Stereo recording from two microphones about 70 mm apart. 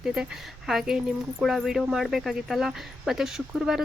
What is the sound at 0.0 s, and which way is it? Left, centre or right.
Speech, centre.